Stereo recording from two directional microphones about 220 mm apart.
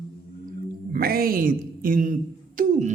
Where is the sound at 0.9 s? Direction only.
40° right (ahead or behind).